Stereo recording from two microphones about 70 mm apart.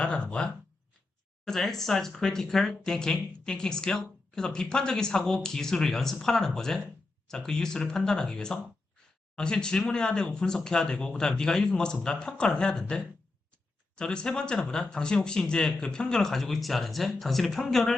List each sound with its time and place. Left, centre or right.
0.0 s speech: centre
1.5 s speech: centre